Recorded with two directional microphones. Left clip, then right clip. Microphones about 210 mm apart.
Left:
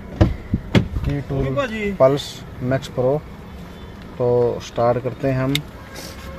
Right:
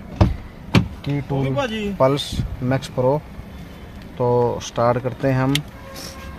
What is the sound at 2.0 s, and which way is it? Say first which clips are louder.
Speech: left 3 dB; 25° right (ahead or behind).